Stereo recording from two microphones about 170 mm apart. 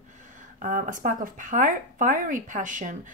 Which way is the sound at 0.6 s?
50° right (ahead or behind).